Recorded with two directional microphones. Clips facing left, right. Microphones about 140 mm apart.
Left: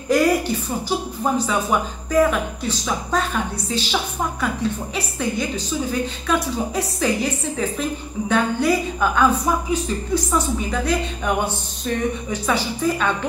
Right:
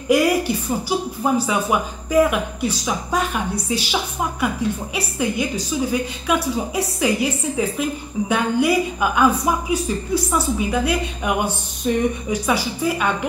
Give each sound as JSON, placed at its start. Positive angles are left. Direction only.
{"t": 0.1, "sound": "a woman's voice", "side_deg": -10}